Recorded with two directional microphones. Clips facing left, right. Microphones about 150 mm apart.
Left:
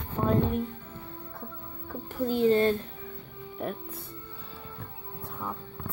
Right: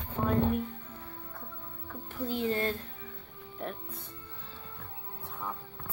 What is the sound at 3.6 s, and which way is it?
Speech, 5° left (ahead or behind).